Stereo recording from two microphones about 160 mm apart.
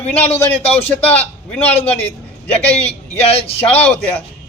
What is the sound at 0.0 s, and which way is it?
Speech, 40° left (ahead or behind).